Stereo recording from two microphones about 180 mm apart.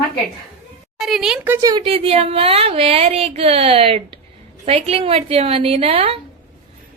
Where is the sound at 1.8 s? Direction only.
30° right (ahead or behind).